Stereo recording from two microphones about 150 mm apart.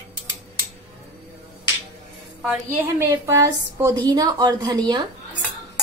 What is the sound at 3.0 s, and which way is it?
A woman's voice, 15° right (ahead or behind).